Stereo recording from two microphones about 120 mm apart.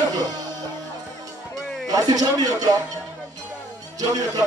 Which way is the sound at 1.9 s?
30° right (ahead or behind).